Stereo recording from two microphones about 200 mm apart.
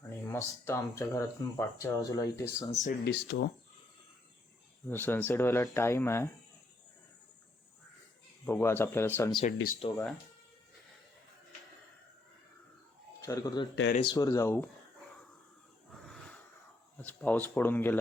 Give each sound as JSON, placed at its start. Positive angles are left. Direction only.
{"t": 0.3, "sound": "speech", "side_deg": 15}
{"t": 2.6, "sound": "speech", "side_deg": 35}
{"t": 3.1, "sound": "speech", "side_deg": 55}
{"t": 4.9, "sound": "speech", "side_deg": 10}
{"t": 8.4, "sound": "speech", "side_deg": 10}
{"t": 13.2, "sound": "speech", "side_deg": 15}
{"t": 17.0, "sound": "speech", "side_deg": 5}